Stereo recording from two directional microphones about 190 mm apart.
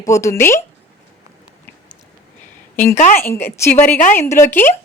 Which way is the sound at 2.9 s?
40° left (ahead or behind).